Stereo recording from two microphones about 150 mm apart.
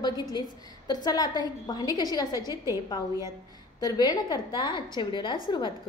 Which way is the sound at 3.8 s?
25° left (ahead or behind).